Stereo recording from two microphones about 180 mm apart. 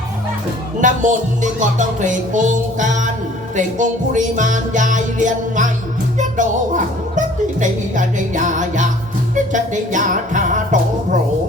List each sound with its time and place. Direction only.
0.8 s speech: 45° right (ahead or behind)